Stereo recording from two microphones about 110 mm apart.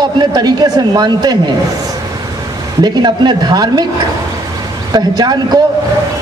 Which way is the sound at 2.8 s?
40° right (ahead or behind).